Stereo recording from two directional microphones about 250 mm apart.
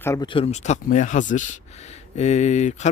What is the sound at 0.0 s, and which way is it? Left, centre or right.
Speech, centre.